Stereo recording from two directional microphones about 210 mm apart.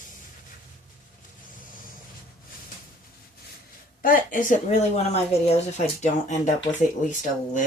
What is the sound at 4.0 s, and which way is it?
Speech, 40° left (ahead or behind).